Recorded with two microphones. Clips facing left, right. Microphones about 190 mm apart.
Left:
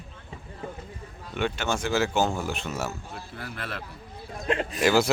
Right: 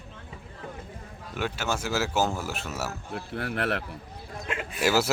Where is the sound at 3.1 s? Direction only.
70° right (ahead or behind).